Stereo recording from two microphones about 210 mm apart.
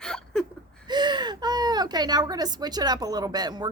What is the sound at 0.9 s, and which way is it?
Speech, 20° right (ahead or behind).